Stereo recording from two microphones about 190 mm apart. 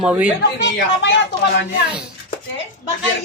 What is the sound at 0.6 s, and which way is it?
Speech, 70° left (ahead or behind).